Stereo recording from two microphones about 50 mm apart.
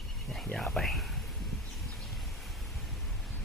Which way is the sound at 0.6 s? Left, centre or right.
Centre.